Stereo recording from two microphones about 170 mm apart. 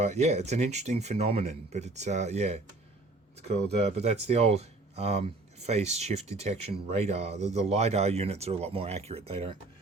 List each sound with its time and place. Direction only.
0.0 s speech: 40° right (ahead or behind)